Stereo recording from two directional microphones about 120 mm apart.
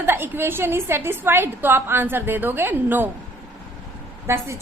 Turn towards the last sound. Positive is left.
turn(degrees=-20)  # may be behind; listen again after turning